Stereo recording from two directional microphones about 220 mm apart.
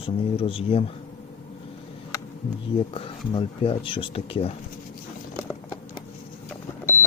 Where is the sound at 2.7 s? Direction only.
25° left (ahead or behind).